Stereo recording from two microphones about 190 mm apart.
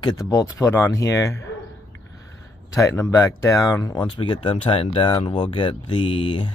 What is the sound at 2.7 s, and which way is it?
Speech, 15° left (ahead or behind).